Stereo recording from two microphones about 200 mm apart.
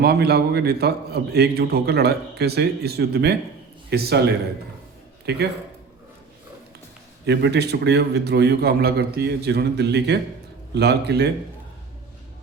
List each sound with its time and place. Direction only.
0.0 s a man's voice: 55° right (ahead or behind)
7.3 s a man's voice: 55° right (ahead or behind)